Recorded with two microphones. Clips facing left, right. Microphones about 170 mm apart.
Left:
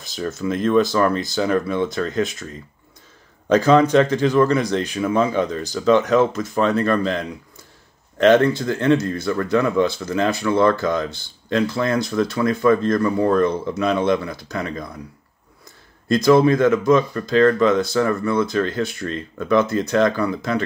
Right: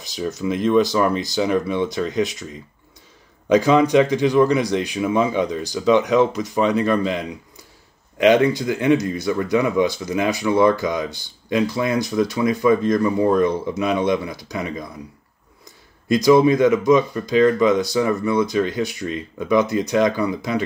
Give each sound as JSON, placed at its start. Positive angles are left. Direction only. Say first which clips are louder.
{"t": 0.0, "sound": "speech", "louder": "even", "side_deg": -15}
{"t": 16.1, "sound": "speech", "louder": "even", "side_deg": -15}